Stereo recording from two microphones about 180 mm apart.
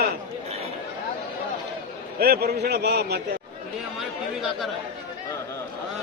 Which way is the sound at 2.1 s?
60° right (ahead or behind).